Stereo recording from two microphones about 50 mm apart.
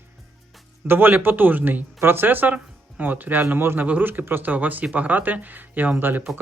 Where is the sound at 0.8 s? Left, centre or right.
Right.